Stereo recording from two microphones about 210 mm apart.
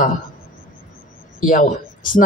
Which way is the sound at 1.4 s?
40° left (ahead or behind).